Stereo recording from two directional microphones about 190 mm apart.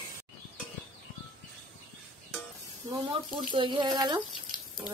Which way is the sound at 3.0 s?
25° right (ahead or behind).